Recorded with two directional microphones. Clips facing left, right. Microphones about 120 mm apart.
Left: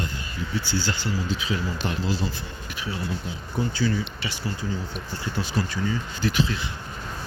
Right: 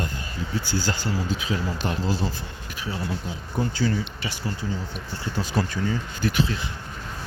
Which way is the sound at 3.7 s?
40° right (ahead or behind).